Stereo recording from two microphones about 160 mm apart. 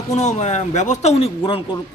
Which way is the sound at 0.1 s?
45° left (ahead or behind).